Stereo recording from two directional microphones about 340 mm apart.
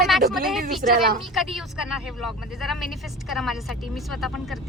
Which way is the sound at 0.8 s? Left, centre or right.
Right.